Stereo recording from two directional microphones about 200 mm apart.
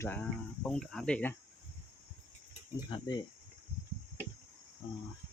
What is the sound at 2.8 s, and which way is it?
Cricket, 20° left (ahead or behind).